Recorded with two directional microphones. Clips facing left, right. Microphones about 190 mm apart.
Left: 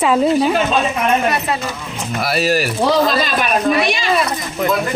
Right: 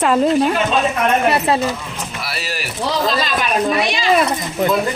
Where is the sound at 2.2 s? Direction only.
45° left (ahead or behind).